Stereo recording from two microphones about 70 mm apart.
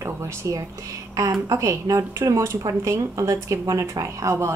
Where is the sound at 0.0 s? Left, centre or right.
Right.